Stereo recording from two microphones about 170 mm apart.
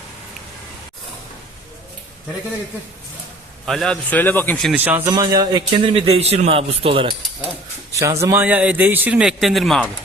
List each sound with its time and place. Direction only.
3.7 s speech: 5° left (ahead or behind)
4.7 s a man's voice: 10° right (ahead or behind)
5.1 s a man's voice: 25° right (ahead or behind)
7.9 s a man's voice: 20° right (ahead or behind); by 9.9 s centre (ahead or behind)